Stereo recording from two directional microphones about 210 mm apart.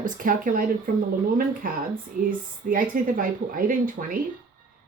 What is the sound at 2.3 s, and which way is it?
A woman's voice, 40° right (ahead or behind).